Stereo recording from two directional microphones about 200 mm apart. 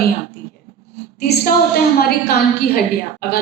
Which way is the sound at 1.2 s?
50° left (ahead or behind).